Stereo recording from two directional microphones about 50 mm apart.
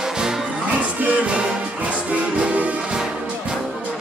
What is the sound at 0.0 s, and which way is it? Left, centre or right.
Music, centre.